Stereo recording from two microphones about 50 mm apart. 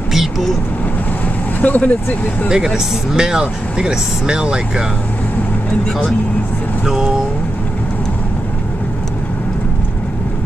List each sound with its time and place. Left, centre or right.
0.1 s vehicle: centre
1.6 s speech: left
2.5 s speech: centre
6.9 s speech: centre